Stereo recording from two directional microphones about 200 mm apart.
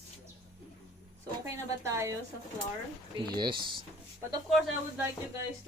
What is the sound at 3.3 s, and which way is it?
Speech, 20° right (ahead or behind).